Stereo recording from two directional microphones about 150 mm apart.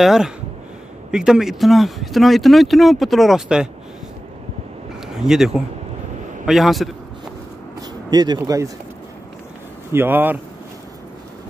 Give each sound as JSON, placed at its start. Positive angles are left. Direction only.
{"t": 0.0, "sound": "speech", "side_deg": -5}
{"t": 5.0, "sound": "speech", "side_deg": -5}
{"t": 8.1, "sound": "speech", "side_deg": -25}
{"t": 9.9, "sound": "speech", "side_deg": -15}